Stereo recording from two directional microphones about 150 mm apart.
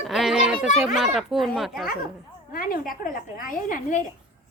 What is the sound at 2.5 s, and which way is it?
A woman's voice, 75° left (ahead or behind).